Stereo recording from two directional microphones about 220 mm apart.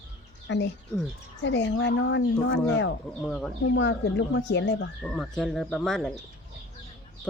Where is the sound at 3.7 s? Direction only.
55° left (ahead or behind).